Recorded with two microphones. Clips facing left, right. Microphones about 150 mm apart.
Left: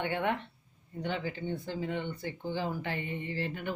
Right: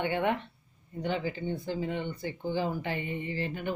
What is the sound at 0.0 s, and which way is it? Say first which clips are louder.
Speech: right 3 dB; 15° right (ahead or behind).